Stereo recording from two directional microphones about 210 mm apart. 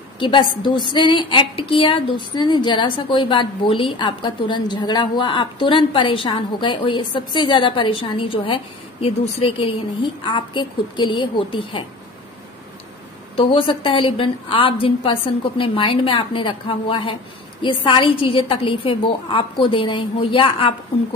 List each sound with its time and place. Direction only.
0.2 s a woman's voice: 25° left (ahead or behind)
13.4 s a woman's voice: 25° left (ahead or behind)